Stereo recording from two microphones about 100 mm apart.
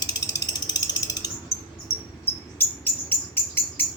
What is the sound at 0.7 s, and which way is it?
Ratchet, 40° left (ahead or behind).